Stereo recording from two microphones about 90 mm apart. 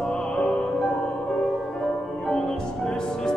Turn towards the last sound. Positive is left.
turn(degrees=5)  # may be behind; listen again after turning